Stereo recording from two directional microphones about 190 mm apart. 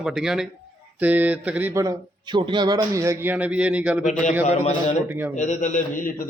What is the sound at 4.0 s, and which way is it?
A man's voice, 40° left (ahead or behind).